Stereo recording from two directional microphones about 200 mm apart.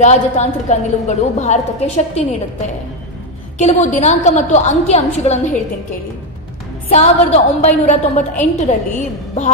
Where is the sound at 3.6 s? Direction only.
35° left (ahead or behind).